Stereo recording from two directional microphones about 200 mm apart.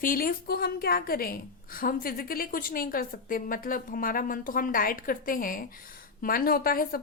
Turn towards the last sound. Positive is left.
turn(degrees=45)  # may be behind; listen again after turning